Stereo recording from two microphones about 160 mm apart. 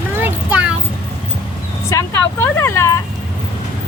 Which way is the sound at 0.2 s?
10° right (ahead or behind).